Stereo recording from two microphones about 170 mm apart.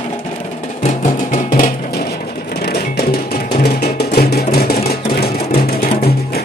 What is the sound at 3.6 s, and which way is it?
Music, 70° left (ahead or behind).